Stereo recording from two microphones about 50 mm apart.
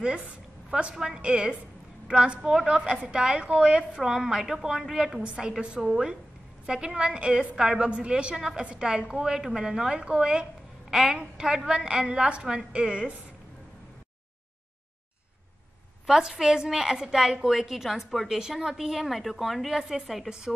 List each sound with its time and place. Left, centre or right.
0.7 s a woman's voice: right
5.2 s a woman's voice: centre
5.8 s a woman's voice: centre
6.6 s a woman's voice: centre
16.1 s a woman's voice: centre
20.2 s a woman's voice: centre